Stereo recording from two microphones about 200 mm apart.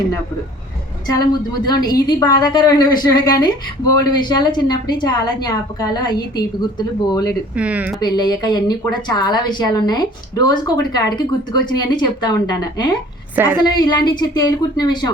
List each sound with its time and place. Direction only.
1.3 s a woman's voice: 20° left (ahead or behind)
7.5 s speech: 5° right (ahead or behind)
8.0 s a woman's voice: 20° left (ahead or behind)
13.3 s speech: 10° right (ahead or behind)
13.6 s a woman's voice: 20° left (ahead or behind)